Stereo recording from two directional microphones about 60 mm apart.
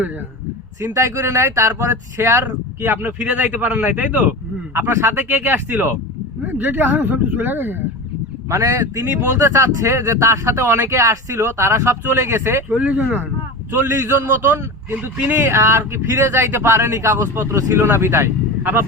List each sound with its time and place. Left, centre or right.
0.8 s speech: right
2.8 s speech: right
3.1 s a man's voice: right
4.7 s speech: right
5.3 s speech: right
8.4 s speech: right
12.7 s a man's voice: right
13.7 s speech: right
14.4 s a man's voice: right
15.4 s speech: right
18.6 s speech: right